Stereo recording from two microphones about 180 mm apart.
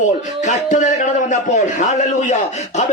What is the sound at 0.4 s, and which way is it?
A man's voice, 45° left (ahead or behind).